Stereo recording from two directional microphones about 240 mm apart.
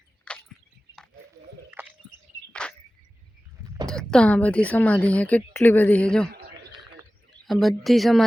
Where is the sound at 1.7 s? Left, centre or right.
Centre.